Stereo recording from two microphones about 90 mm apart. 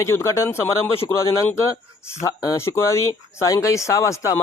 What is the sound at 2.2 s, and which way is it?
A man's voice, 35° left (ahead or behind).